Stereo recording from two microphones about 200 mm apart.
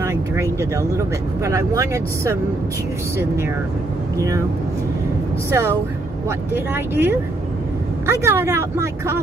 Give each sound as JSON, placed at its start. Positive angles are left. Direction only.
{"t": 0.0, "sound": "speech", "side_deg": -15}
{"t": 5.5, "sound": "speech", "side_deg": -10}